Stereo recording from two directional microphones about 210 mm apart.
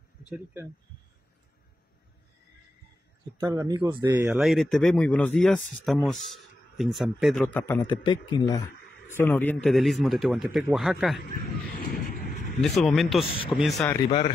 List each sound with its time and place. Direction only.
3.3 s a man's voice: 20° right (ahead or behind); by 7.9 s 10° left (ahead or behind)
7.9 s a man's voice: 20° left (ahead or behind); by 11.2 s centre (ahead or behind)
11.7 s vehicle: 45° left (ahead or behind)
12.5 s a man's voice: centre (ahead or behind)